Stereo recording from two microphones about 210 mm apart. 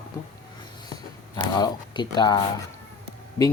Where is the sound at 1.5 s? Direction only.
20° left (ahead or behind).